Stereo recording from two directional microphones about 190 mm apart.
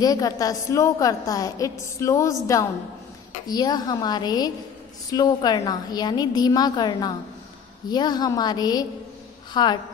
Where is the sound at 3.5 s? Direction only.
20° left (ahead or behind).